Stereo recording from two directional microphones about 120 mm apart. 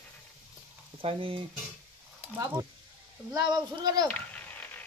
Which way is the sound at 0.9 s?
50° right (ahead or behind).